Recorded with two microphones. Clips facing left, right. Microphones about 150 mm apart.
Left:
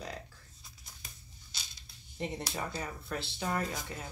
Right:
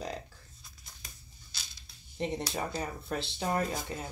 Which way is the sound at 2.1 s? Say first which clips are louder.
Right 4 dB; 20° right (ahead or behind).